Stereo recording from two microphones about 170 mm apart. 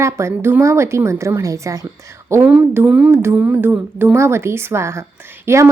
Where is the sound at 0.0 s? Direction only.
15° right (ahead or behind).